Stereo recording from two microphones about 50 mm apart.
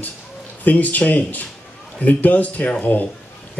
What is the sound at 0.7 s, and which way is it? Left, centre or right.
Speech, left.